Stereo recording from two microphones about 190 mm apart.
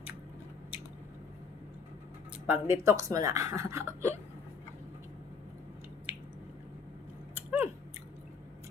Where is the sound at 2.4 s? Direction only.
10° right (ahead or behind).